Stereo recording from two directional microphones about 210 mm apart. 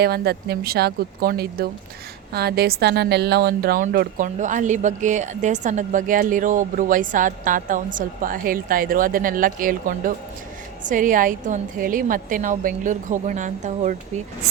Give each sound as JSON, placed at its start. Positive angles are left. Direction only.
{"t": 0.0, "sound": "a woman's voice", "side_deg": -50}